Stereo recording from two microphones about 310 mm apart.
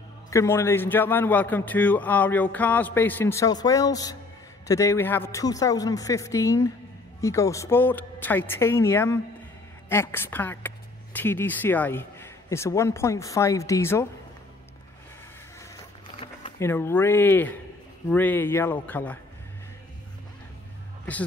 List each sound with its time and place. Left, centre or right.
0.3 s a man's voice: centre
15.7 s a sound: centre
18.1 s a man's voice: centre
21.0 s music: centre